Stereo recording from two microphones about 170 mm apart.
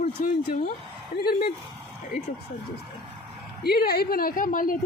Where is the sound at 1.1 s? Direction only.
65° left (ahead or behind).